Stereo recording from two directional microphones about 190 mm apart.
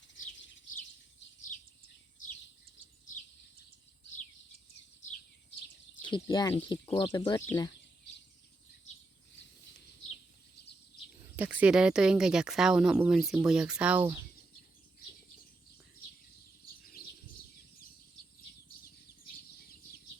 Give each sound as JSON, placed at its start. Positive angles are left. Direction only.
{"t": 6.1, "sound": "speech", "side_deg": 25}
{"t": 11.3, "sound": "speech", "side_deg": -10}